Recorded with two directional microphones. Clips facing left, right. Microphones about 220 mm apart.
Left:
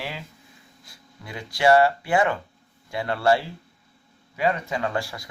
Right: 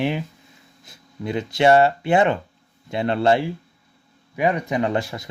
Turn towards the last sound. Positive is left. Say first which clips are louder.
# right 5 dB
turn(degrees=-20)  # may be behind; listen again after turning